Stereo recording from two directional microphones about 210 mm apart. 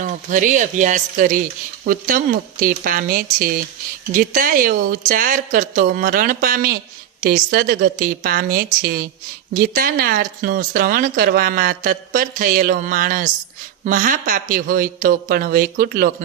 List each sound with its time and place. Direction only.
0.0 s speech: 40° right (ahead or behind)